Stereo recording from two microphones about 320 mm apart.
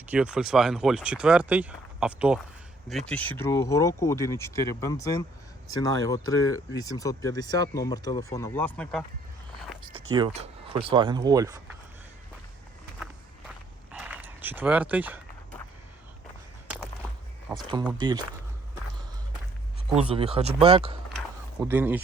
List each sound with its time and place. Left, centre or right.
0.0 s speech: centre
5.7 s speech: right
6.8 s speech: centre
10.2 s speech: centre
13.9 s dog: centre
16.6 s a sound: centre
17.7 s speech: centre
20.0 s speech: centre
21.6 s speech: centre